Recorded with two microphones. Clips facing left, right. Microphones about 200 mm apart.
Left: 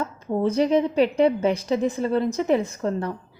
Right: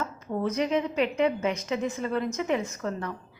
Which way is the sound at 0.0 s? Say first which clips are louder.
Left 6 dB; 30° left (ahead or behind).